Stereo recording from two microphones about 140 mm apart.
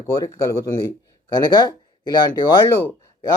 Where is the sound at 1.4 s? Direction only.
30° left (ahead or behind).